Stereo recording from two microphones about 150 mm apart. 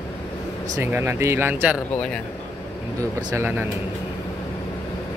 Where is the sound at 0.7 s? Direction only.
15° right (ahead or behind).